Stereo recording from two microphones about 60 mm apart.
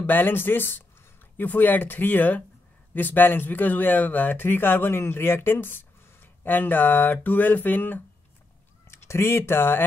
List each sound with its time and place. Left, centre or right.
0.0 s speech: left
8.8 s speech: left